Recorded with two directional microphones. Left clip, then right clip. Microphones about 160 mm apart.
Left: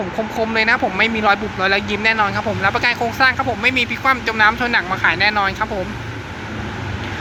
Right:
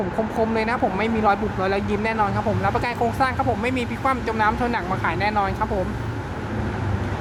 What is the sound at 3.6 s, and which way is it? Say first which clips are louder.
Speech: left 7 dB; 10° right (ahead or behind).